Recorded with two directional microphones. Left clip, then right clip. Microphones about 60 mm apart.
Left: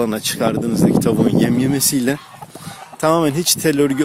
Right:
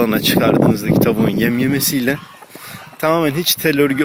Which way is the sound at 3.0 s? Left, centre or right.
Left.